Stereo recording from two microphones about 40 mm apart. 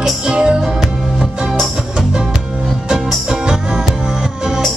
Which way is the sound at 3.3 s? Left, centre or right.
Right.